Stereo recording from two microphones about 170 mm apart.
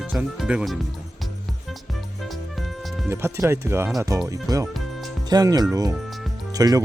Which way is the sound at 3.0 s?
15° right (ahead or behind).